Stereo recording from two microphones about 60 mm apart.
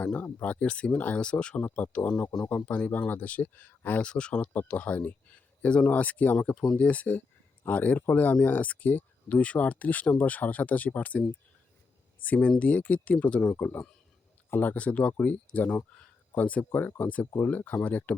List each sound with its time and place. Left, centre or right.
0.0 s speech: left
4.1 s speech: centre
6.5 s speech: centre
6.7 s speech: left
12.2 s speech: left
14.5 s speech: left